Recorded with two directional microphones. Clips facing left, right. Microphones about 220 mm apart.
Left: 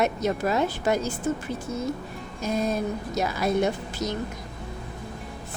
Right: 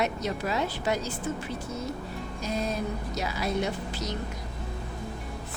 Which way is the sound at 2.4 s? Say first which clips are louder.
Left 5 dB; 50° left (ahead or behind).